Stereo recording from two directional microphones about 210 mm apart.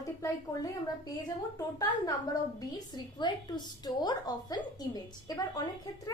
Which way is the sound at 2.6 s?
20° left (ahead or behind).